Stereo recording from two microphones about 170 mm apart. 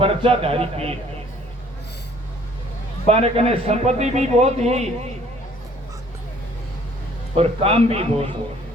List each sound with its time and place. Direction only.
0.0 s a man's voice: 35° right (ahead or behind)
3.1 s a man's voice: 40° right (ahead or behind)
7.3 s a man's voice: 35° right (ahead or behind)